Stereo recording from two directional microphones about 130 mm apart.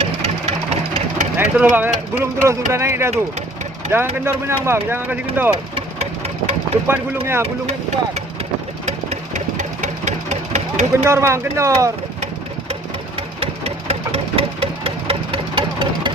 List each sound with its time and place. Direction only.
0.2 s vehicle: 55° right (ahead or behind)
1.4 s speech: 15° right (ahead or behind)
5.7 s engine: 55° right (ahead or behind)
6.8 s speech: 15° right (ahead or behind)
7.4 s speech: 55° right (ahead or behind)
8.9 s engine: 65° right (ahead or behind)
10.9 s speech: 20° right (ahead or behind)
13.1 s engine: 50° right (ahead or behind)